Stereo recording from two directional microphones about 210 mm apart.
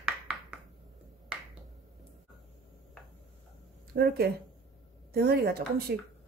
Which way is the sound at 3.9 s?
50° right (ahead or behind).